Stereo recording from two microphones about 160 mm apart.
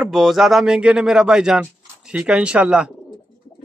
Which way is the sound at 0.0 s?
Centre (ahead or behind).